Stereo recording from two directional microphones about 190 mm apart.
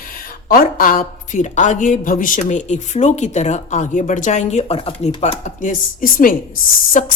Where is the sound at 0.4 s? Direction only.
50° left (ahead or behind).